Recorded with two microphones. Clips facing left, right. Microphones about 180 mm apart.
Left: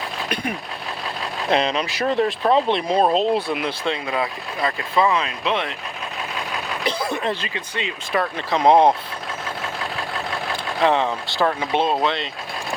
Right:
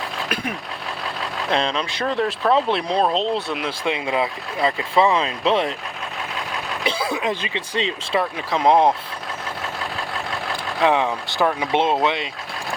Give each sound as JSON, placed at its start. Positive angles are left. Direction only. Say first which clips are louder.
{"t": 1.5, "sound": "speech", "louder": "left 2 dB", "side_deg": 5}
{"t": 3.8, "sound": "speech", "louder": "right 4 dB", "side_deg": -20}
{"t": 6.8, "sound": "speech", "louder": "right 1 dB", "side_deg": -5}
{"t": 7.5, "sound": "speech", "louder": "right 4 dB", "side_deg": -25}
{"t": 8.2, "sound": "speech", "louder": "left 2 dB", "side_deg": -10}
{"t": 10.8, "sound": "speech", "louder": "even", "side_deg": -15}